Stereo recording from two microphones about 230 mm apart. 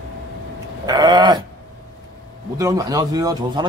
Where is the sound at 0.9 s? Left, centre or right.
Centre.